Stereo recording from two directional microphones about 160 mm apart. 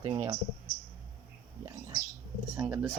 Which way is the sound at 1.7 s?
25° right (ahead or behind).